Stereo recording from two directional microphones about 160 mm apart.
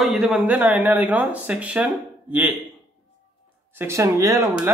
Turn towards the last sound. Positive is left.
turn(degrees=-15)  # may be behind; listen again after turning